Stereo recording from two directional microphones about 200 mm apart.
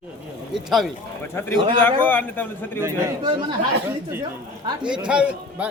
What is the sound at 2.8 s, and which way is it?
Speech, 15° right (ahead or behind).